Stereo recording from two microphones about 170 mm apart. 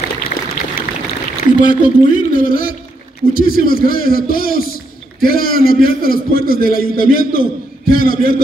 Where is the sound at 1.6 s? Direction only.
50° left (ahead or behind).